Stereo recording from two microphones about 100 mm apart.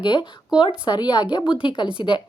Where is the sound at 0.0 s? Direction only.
50° left (ahead or behind).